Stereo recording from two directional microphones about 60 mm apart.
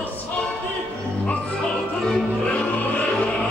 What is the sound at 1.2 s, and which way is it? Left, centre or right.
Music, left.